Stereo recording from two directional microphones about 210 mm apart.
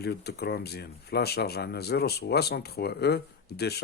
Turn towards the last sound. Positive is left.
turn(degrees=50)  # may be behind; listen again after turning